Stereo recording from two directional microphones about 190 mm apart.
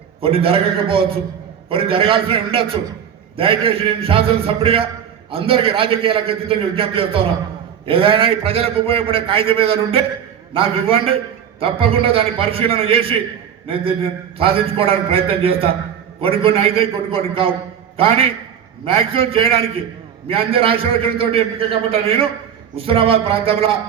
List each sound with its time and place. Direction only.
0.2 s a man's voice: 30° right (ahead or behind)